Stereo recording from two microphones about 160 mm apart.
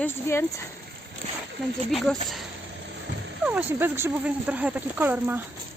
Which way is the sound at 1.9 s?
Centre (ahead or behind).